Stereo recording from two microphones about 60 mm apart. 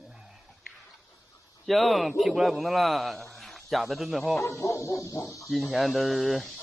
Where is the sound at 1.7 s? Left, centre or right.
Centre.